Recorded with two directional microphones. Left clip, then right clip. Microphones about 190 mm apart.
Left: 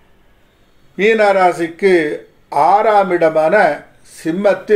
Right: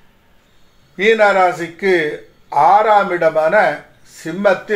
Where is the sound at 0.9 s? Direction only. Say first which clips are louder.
Even; 55° left (ahead or behind).